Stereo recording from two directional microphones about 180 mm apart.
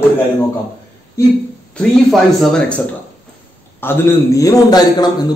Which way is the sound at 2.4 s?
5° left (ahead or behind).